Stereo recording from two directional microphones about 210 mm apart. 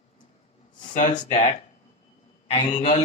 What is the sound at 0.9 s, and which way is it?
Speech, 35° left (ahead or behind).